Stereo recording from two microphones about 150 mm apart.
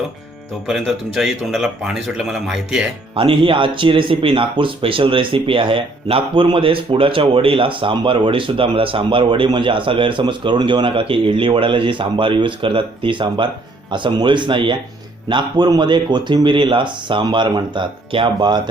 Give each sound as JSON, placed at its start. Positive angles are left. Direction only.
{"t": 0.7, "sound": "speech", "side_deg": 0}
{"t": 3.2, "sound": "speech", "side_deg": -35}